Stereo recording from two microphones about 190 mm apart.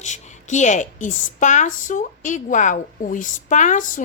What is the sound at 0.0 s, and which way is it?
A woman's voice, 40° left (ahead or behind).